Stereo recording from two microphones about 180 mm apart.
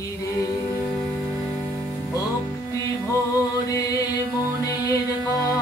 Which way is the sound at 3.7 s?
20° left (ahead or behind).